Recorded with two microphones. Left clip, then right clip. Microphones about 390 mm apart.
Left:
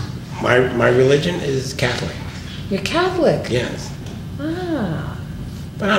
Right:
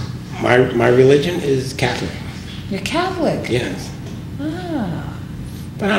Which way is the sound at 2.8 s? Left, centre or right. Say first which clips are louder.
Left 2 dB; left.